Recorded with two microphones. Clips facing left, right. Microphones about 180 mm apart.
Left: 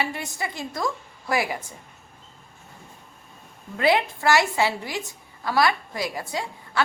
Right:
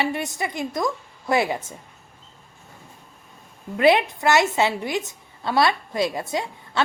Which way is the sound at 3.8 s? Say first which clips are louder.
Right 4 dB; 20° right (ahead or behind).